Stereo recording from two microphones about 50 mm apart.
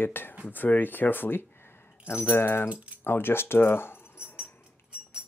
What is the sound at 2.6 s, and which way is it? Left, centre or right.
Speech, right.